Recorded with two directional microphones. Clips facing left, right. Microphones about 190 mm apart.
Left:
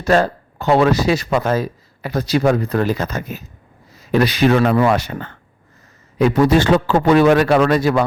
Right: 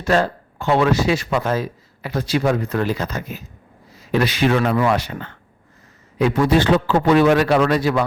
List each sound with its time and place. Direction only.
0.0 s a man's voice: 40° left (ahead or behind)